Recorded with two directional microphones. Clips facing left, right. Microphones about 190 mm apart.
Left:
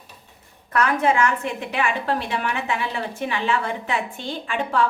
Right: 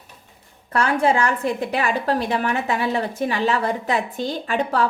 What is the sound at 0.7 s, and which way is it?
A woman's voice, 30° right (ahead or behind).